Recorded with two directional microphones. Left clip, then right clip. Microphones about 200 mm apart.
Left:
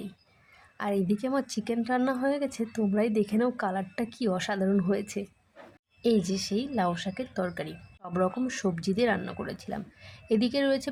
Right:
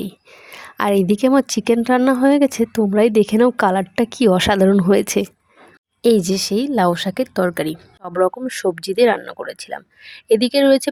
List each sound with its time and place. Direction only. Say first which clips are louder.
0.5 s a woman's voice: right 13 dB; 45° right (ahead or behind)